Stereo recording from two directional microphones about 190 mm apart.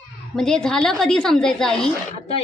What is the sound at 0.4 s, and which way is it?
A woman's voice, 5° left (ahead or behind).